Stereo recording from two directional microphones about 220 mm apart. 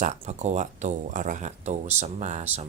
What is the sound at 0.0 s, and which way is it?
Speech, 30° right (ahead or behind).